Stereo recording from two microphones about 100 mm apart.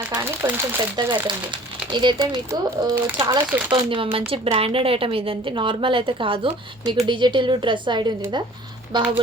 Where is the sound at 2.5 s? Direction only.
30° right (ahead or behind).